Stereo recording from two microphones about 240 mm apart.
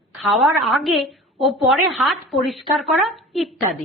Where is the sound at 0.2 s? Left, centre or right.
Centre.